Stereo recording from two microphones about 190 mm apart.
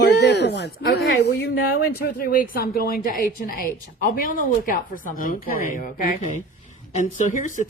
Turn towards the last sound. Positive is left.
turn(degrees=40)  # may be behind; listen again after turning